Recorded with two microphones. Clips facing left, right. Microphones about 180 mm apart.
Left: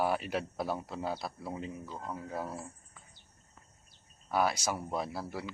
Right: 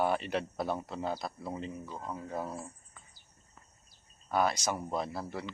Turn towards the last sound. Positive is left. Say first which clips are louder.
# right 1 dB
turn(degrees=5)  # may be behind; listen again after turning